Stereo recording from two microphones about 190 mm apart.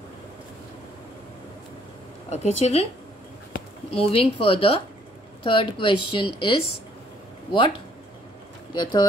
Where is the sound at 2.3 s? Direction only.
35° left (ahead or behind).